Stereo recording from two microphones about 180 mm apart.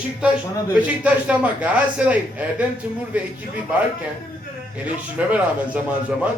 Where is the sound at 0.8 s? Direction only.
10° right (ahead or behind).